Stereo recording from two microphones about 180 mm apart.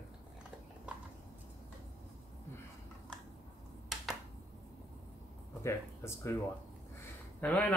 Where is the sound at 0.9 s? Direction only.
5° right (ahead or behind).